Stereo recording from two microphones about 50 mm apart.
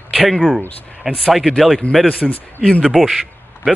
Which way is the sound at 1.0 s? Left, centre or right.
Centre.